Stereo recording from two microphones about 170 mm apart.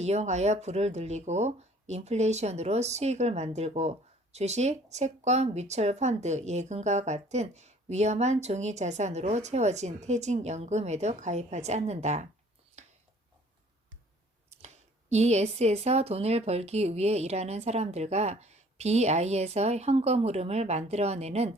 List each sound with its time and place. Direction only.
0.0 s speech: 40° right (ahead or behind)
12.8 s a sound: 40° right (ahead or behind)
15.1 s speech: 40° right (ahead or behind)